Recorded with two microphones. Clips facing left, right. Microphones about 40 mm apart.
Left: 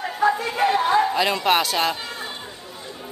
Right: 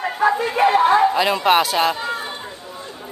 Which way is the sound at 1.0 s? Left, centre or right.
Centre.